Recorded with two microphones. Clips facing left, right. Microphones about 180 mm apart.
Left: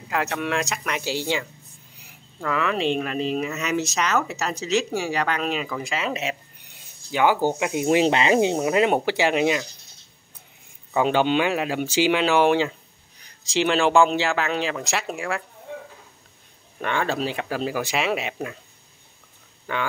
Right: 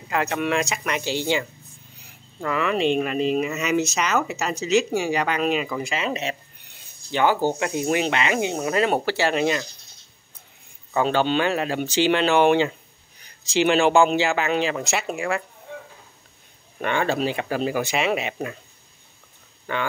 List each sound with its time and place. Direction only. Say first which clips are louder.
0.1 s speech: right 2 dB; 5° right (ahead or behind); by 7.9 s 10° left (ahead or behind)
7.9 s speech: left 6 dB; 30° left (ahead or behind)
8.5 s speech: left 2 dB; 15° left (ahead or behind)
10.9 s speech: left 1 dB; 15° left (ahead or behind)
16.8 s speech: right 2 dB; 5° right (ahead or behind)
19.7 s speech: right 1 dB; 5° left (ahead or behind)